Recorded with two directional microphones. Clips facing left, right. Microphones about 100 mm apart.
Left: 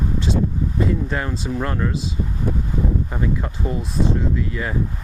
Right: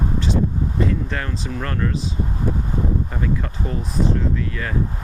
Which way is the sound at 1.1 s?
15° left (ahead or behind).